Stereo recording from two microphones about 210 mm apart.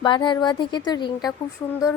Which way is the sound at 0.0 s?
20° left (ahead or behind).